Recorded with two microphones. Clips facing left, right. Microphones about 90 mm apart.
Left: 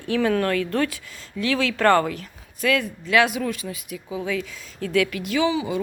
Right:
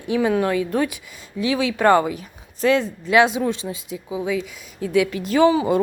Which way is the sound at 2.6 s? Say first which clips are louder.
Right 4 dB; 25° right (ahead or behind).